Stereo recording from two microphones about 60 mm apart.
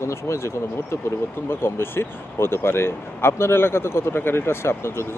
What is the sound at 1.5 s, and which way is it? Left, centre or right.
Speech, left.